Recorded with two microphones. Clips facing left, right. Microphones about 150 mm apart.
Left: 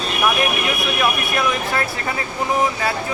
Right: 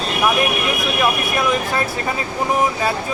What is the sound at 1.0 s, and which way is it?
Speech, 20° right (ahead or behind).